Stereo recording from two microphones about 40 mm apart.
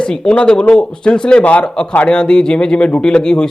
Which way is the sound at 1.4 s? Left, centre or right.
Left.